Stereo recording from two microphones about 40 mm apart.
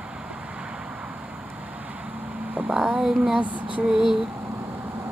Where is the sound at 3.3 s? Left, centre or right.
Right.